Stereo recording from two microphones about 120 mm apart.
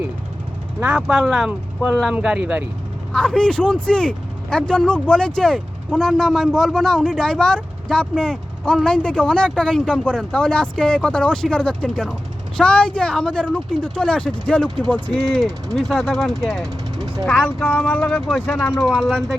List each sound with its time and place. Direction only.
0.8 s speech: 10° right (ahead or behind)
3.1 s speech: 5° left (ahead or behind)
16.6 s vehicle: 30° right (ahead or behind)
17.2 s speech: 10° left (ahead or behind)
18.7 s speech: 5° right (ahead or behind)